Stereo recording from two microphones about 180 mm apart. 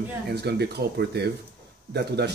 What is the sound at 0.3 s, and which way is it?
A man's voice, 65° right (ahead or behind).